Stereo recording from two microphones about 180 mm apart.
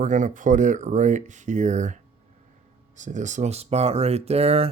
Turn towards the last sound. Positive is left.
turn(degrees=-35)  # may be behind; listen again after turning